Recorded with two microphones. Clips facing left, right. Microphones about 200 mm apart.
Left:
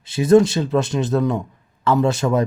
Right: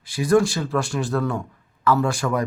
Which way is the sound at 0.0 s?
25° left (ahead or behind).